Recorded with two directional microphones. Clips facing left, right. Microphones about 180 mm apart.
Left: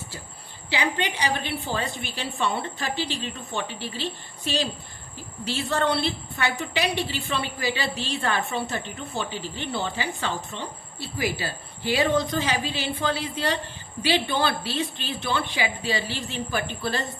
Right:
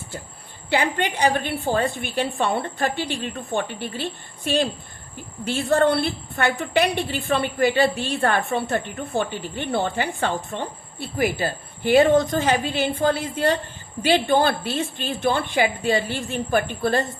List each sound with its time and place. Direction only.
0.7 s a woman's voice: 50° right (ahead or behind)